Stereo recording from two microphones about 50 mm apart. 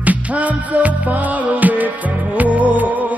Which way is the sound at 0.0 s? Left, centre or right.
Right.